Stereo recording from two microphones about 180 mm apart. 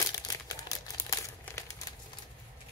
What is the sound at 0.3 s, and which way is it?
Crumpling, 20° left (ahead or behind).